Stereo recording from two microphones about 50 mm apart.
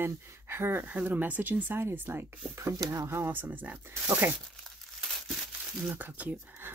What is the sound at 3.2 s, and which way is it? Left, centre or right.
Speech, right.